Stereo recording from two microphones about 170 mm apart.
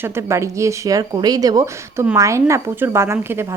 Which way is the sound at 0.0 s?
15° right (ahead or behind).